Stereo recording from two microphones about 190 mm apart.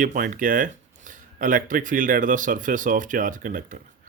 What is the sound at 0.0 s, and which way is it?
Speech, 45° right (ahead or behind).